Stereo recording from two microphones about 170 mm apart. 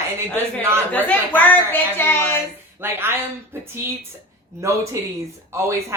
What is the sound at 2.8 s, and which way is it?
Speech, 15° right (ahead or behind).